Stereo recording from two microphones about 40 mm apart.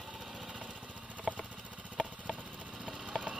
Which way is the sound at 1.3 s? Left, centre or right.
Centre.